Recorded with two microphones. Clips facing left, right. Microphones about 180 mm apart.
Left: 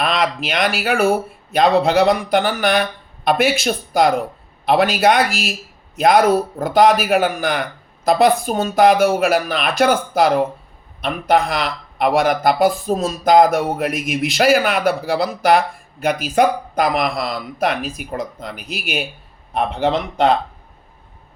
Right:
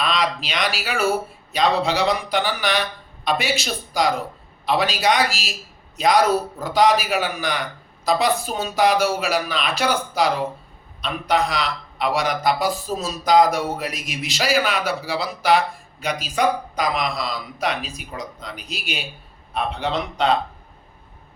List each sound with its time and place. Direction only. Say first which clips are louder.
0.0 s a man's voice: left 4 dB; 55° left (ahead or behind)